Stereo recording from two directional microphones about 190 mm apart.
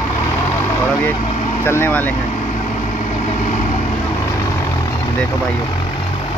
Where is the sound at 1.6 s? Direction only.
10° left (ahead or behind).